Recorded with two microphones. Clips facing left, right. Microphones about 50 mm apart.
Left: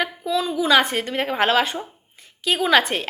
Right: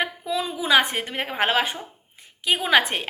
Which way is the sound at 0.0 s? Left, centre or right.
Centre.